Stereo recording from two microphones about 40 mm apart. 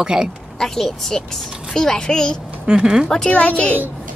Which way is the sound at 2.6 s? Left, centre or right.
Centre.